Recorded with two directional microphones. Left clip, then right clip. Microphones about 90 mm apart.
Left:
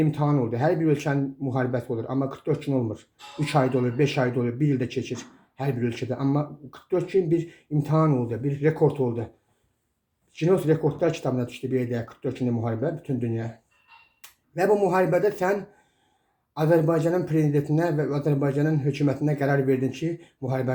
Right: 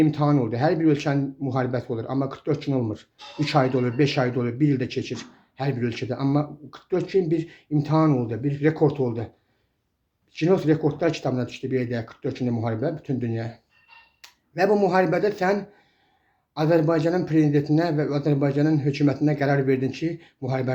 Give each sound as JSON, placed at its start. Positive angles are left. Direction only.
{"t": 0.0, "sound": "speech", "side_deg": -20}
{"t": 10.3, "sound": "speech", "side_deg": -20}
{"t": 16.6, "sound": "speech", "side_deg": -20}